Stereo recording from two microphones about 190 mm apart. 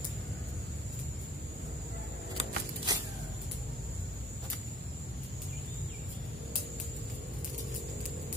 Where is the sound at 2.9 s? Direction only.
20° right (ahead or behind).